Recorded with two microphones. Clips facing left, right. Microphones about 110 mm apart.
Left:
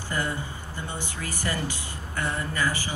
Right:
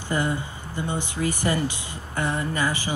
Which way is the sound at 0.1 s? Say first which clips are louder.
Right 5 dB; 20° right (ahead or behind).